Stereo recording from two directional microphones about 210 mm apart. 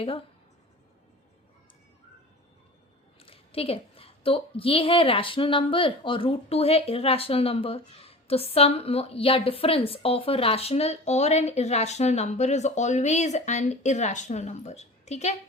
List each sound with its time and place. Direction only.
3.2 s a woman's voice: 25° left (ahead or behind)